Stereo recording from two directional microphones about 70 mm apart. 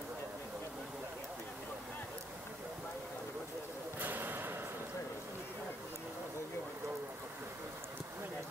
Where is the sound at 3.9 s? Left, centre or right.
Right.